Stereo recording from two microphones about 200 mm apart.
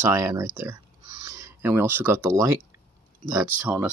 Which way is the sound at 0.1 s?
15° right (ahead or behind).